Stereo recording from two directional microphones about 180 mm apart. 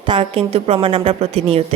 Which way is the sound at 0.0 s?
30° right (ahead or behind).